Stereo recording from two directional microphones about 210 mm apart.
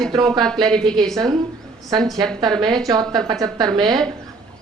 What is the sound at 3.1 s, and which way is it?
Speech, 15° right (ahead or behind).